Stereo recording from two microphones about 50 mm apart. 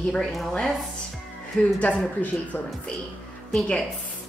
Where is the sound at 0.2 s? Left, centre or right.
Centre.